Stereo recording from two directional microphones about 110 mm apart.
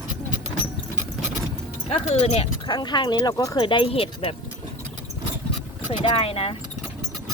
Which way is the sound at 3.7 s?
50° left (ahead or behind).